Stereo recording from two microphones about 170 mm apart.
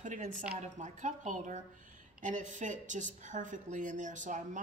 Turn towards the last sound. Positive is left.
turn(degrees=-45)  # may be behind; listen again after turning